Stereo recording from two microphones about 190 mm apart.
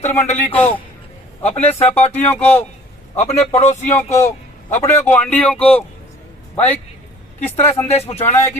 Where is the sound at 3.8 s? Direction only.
10° left (ahead or behind).